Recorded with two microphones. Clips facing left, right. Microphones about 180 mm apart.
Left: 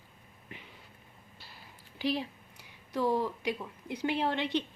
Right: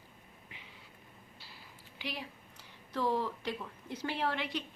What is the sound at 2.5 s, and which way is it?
Speech, 10° left (ahead or behind).